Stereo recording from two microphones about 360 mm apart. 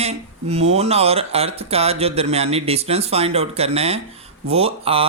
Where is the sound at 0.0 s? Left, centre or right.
Centre.